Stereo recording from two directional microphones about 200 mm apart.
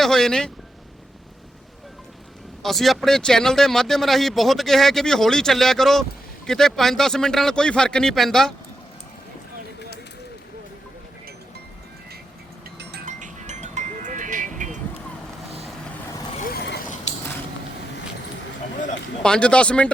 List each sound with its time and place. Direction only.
0.0 s speech: centre (ahead or behind)
2.6 s speech: centre (ahead or behind)
13.1 s music: 40° right (ahead or behind)
16.5 s vehicle: 50° left (ahead or behind)
19.2 s speech: 5° left (ahead or behind)